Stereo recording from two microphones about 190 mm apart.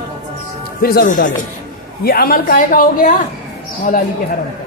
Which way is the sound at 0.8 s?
45° left (ahead or behind).